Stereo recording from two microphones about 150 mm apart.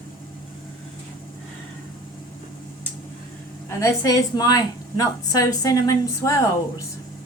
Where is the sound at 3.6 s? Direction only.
20° left (ahead or behind).